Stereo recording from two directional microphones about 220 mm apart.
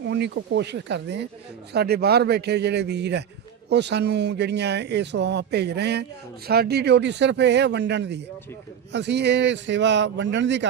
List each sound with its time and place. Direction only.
0.0 s speech: 50° right (ahead or behind)